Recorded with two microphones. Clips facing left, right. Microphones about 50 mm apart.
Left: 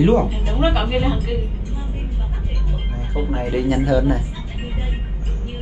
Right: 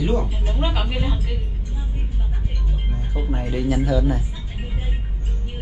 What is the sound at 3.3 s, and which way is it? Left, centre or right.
Speech, left.